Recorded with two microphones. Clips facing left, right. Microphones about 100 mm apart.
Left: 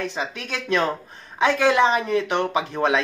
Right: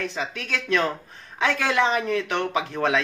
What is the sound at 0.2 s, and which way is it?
Speech, 20° left (ahead or behind).